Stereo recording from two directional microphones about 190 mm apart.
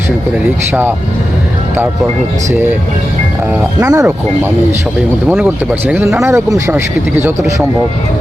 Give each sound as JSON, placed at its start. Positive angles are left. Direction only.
{"t": 0.7, "sound": "speech", "side_deg": -10}
{"t": 3.5, "sound": "speech", "side_deg": -15}